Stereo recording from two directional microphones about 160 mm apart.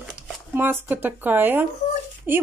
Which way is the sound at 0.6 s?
10° right (ahead or behind).